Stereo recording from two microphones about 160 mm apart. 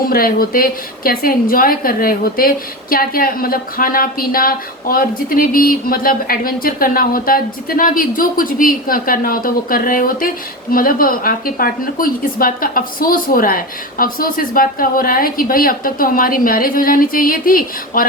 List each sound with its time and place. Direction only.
0.0 s a woman's voice: 65° left (ahead or behind)